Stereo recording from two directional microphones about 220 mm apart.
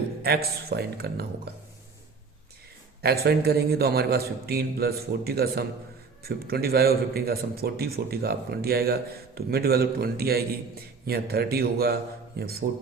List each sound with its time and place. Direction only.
0.2 s a man's voice: 45° right (ahead or behind)
3.2 s a man's voice: 45° right (ahead or behind)